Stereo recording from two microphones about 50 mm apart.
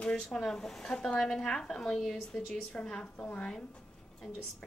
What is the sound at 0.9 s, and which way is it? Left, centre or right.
A woman's voice, centre.